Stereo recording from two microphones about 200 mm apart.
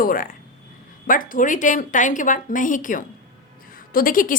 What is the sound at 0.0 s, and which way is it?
A woman's voice, 45° left (ahead or behind).